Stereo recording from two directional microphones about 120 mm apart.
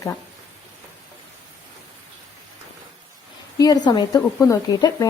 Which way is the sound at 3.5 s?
30° left (ahead or behind).